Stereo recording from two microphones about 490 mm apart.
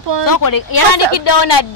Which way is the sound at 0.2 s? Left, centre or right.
Left.